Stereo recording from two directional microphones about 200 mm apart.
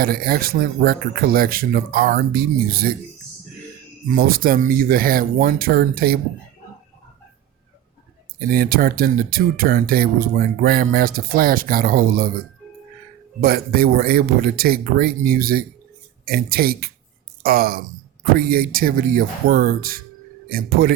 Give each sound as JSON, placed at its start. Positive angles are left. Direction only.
{"t": 0.0, "sound": "speech", "side_deg": -45}
{"t": 4.1, "sound": "speech", "side_deg": -45}
{"t": 8.4, "sound": "speech", "side_deg": -45}
{"t": 13.4, "sound": "speech", "side_deg": -45}